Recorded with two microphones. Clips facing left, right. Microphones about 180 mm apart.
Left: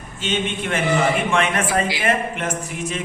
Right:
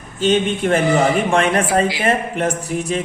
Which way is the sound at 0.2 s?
40° right (ahead or behind).